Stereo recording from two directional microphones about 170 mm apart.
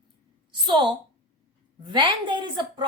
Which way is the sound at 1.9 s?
25° right (ahead or behind).